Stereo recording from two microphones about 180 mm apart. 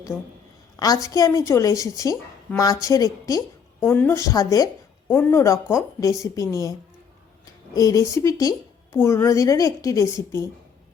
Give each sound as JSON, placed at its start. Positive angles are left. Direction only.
{"t": 0.1, "sound": "a woman's voice", "side_deg": -5}
{"t": 0.8, "sound": "a woman's voice", "side_deg": 20}